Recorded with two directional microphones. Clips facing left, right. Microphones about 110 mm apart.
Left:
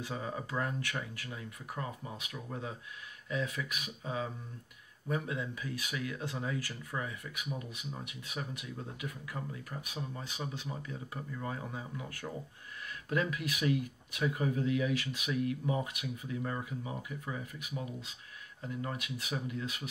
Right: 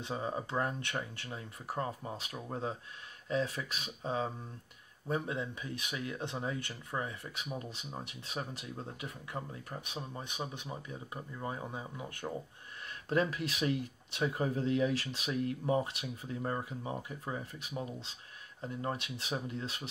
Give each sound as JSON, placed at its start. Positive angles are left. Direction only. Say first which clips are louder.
{"t": 0.0, "sound": "speech", "louder": "right 2 dB", "side_deg": -25}